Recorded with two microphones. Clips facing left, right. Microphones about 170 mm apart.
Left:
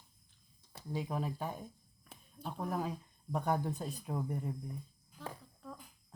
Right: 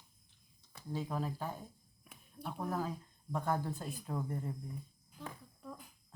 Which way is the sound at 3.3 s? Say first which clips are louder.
Left 2 dB; 15° left (ahead or behind).